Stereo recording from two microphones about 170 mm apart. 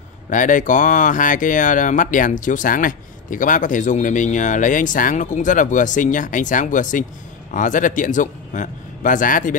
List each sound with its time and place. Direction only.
0.3 s speech: 50° left (ahead or behind)